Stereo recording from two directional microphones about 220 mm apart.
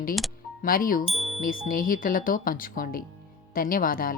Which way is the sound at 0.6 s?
40° left (ahead or behind).